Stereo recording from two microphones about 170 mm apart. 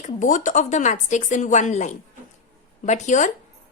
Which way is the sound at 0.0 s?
50° left (ahead or behind).